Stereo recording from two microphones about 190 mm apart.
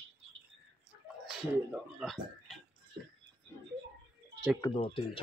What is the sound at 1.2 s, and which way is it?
Speech, centre (ahead or behind).